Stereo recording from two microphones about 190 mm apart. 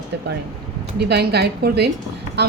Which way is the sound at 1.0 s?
60° right (ahead or behind).